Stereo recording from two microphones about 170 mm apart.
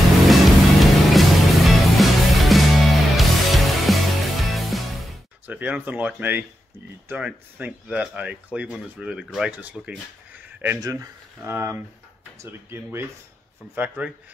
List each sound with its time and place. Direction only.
0.3 s music: centre (ahead or behind)
5.5 s speech: 10° right (ahead or behind)